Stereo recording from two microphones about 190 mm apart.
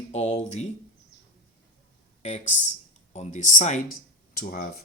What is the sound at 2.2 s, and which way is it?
Speech, 35° left (ahead or behind).